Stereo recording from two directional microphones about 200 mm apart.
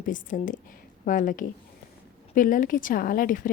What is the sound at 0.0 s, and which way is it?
A woman's voice, 40° left (ahead or behind).